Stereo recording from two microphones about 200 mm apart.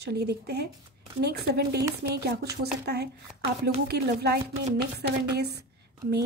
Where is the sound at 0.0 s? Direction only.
55° right (ahead or behind).